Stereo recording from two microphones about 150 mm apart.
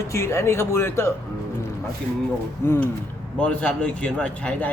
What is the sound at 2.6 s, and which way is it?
A man's voice, 15° left (ahead or behind).